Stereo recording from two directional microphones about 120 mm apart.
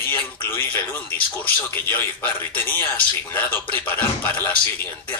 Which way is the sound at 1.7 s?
15° left (ahead or behind).